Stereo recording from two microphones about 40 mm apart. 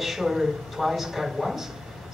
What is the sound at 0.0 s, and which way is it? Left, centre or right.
Speech, centre.